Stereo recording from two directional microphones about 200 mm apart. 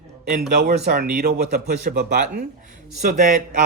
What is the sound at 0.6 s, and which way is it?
Speech, 55° right (ahead or behind).